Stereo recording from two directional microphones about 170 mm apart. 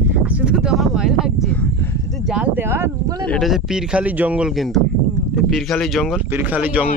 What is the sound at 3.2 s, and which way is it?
Speech, centre (ahead or behind).